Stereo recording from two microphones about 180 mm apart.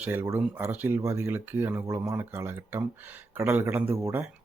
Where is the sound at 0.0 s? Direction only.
10° right (ahead or behind).